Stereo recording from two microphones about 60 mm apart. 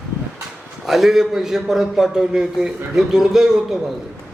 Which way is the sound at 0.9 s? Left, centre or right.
Centre.